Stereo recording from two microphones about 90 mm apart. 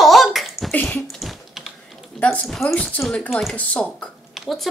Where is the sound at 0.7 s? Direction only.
15° left (ahead or behind).